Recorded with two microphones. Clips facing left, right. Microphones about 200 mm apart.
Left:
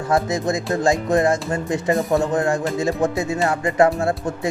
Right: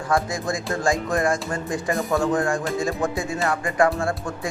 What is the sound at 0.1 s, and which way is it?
A man's voice, 20° left (ahead or behind).